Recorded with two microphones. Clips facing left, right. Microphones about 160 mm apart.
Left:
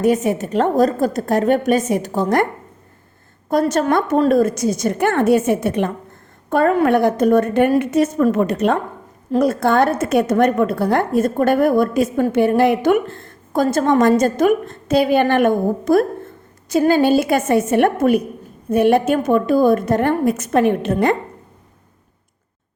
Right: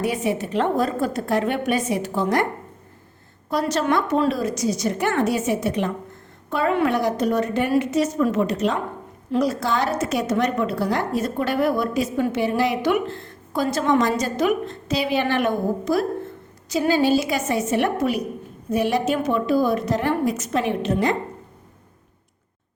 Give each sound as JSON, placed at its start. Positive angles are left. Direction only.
{"t": 0.0, "sound": "a woman's voice", "side_deg": 45}
{"t": 3.5, "sound": "a woman's voice", "side_deg": 50}